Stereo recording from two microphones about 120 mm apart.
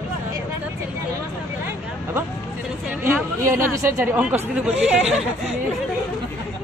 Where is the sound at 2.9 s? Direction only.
20° right (ahead or behind).